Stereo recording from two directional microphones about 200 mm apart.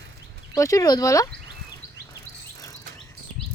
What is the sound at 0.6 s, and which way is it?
Speech, 15° left (ahead or behind).